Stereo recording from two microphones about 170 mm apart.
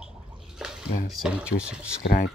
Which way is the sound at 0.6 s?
Centre (ahead or behind).